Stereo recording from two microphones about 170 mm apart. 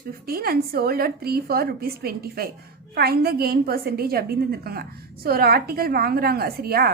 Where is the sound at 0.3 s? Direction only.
65° right (ahead or behind).